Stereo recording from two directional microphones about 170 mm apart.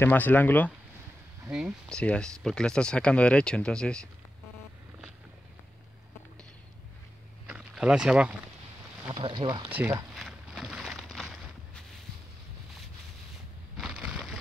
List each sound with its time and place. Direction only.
0.0 s speech: 10° left (ahead or behind)
1.4 s speech: 5° right (ahead or behind)
7.4 s a sound: 5° right (ahead or behind)
9.1 s speech: 30° right (ahead or behind)
10.1 s boat: centre (ahead or behind)
13.7 s a sound: 5° right (ahead or behind)